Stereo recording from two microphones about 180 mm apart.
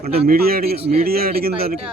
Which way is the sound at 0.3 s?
55° right (ahead or behind).